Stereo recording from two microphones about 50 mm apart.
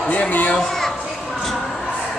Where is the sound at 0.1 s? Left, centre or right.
Left.